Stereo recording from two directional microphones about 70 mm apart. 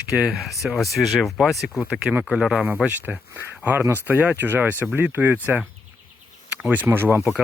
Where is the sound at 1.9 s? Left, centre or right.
Centre.